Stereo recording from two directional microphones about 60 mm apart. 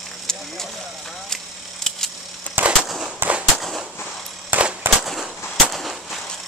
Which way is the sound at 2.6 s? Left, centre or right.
Right.